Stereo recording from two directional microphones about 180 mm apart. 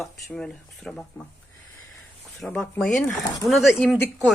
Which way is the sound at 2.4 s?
5° left (ahead or behind).